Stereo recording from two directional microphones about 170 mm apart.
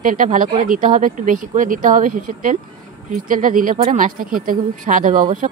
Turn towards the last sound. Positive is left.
turn(degrees=-55)  # may be behind; listen again after turning